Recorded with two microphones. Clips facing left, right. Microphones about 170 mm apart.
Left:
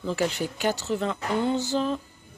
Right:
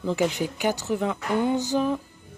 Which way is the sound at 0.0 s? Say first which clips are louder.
Right 2 dB; 15° right (ahead or behind).